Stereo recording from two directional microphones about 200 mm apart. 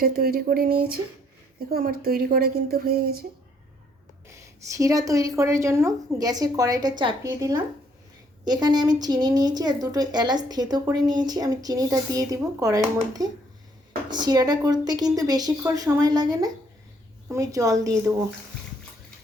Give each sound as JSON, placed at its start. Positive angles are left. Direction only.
{"t": 0.0, "sound": "a woman's voice", "side_deg": -50}
{"t": 4.3, "sound": "a woman's voice", "side_deg": -15}